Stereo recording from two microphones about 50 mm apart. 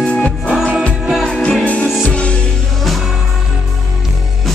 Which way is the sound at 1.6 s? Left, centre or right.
Left.